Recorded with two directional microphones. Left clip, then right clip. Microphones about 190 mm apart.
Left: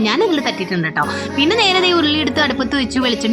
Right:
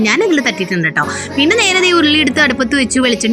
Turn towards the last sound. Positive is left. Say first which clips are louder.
# right 4 dB
turn(degrees=-10)  # may be behind; listen again after turning